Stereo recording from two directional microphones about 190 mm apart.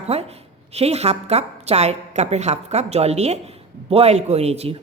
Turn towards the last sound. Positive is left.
turn(degrees=-35)  # may be behind; listen again after turning